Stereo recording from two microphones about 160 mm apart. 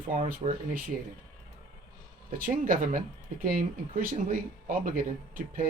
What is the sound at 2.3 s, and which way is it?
Speech, 60° right (ahead or behind).